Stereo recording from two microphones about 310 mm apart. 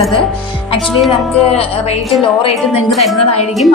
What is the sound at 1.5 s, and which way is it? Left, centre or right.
A woman's voice, centre.